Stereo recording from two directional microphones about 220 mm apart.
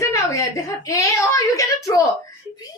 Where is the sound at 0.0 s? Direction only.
15° left (ahead or behind).